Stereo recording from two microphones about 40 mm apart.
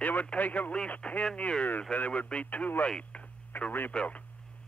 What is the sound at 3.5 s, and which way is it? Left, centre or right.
Speech, left.